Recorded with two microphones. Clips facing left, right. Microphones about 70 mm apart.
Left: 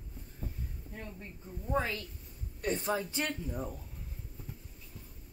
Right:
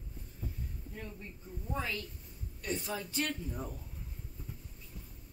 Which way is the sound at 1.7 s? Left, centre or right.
Left.